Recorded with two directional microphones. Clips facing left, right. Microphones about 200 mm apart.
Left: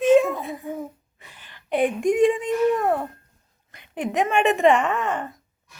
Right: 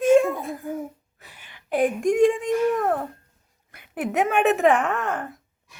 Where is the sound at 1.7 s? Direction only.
Centre (ahead or behind).